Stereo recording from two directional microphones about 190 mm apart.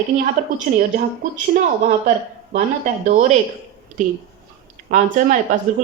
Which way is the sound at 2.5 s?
40° right (ahead or behind).